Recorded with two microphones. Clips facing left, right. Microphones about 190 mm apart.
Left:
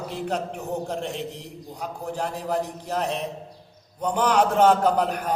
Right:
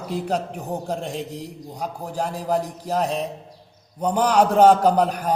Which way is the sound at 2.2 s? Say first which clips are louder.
Right 4 dB; 40° right (ahead or behind).